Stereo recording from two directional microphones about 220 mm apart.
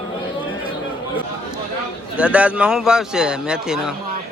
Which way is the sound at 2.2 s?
5° right (ahead or behind).